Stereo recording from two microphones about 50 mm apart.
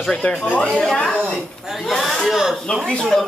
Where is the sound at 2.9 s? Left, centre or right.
Centre.